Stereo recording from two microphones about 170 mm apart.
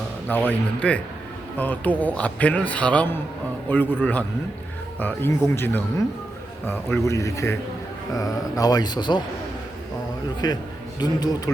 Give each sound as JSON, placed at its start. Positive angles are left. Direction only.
{"t": 0.3, "sound": "a man's voice", "side_deg": 10}
{"t": 4.9, "sound": "a man's voice", "side_deg": 10}
{"t": 10.4, "sound": "speech", "side_deg": 25}